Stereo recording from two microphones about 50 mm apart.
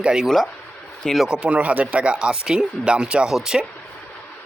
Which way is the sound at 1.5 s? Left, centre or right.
Right.